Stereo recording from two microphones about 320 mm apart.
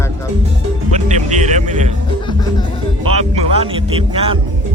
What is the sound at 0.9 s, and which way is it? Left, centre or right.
Music, right.